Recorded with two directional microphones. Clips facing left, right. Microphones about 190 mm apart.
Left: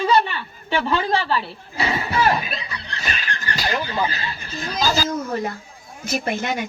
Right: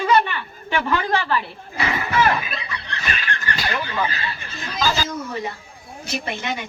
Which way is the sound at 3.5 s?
35° left (ahead or behind).